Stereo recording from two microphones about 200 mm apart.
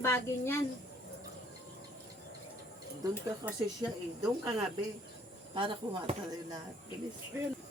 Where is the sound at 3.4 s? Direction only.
15° right (ahead or behind).